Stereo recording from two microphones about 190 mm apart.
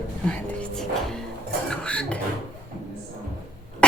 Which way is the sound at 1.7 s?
5° left (ahead or behind).